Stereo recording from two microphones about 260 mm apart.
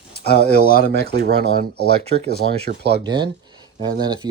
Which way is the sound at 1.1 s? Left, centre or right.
Right.